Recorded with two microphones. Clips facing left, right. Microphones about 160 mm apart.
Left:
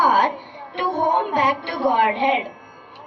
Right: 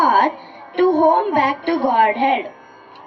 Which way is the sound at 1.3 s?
55° right (ahead or behind).